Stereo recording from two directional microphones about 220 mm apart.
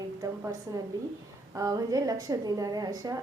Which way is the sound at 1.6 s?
15° right (ahead or behind).